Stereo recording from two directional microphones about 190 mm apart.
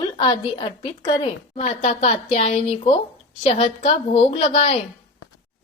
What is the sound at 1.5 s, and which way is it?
A woman's voice, 35° left (ahead or behind).